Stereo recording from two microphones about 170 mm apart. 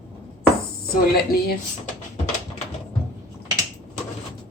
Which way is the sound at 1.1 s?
65° left (ahead or behind).